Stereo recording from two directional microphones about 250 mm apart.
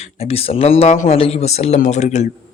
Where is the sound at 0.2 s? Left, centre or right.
Left.